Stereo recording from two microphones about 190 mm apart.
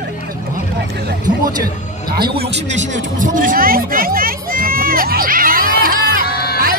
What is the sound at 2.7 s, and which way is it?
Speech, 40° right (ahead or behind).